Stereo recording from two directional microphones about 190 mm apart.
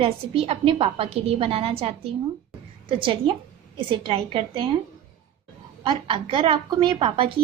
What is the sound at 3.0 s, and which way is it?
A woman's voice, 25° right (ahead or behind).